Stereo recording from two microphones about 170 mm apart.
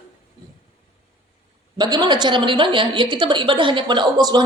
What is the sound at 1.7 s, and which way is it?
A woman's voice, 25° right (ahead or behind).